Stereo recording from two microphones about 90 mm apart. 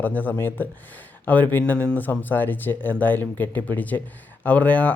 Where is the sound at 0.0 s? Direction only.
20° left (ahead or behind).